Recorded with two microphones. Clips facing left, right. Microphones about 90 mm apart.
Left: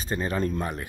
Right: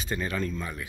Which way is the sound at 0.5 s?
55° left (ahead or behind).